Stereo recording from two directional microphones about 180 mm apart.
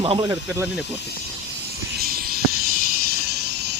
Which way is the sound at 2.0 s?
55° right (ahead or behind).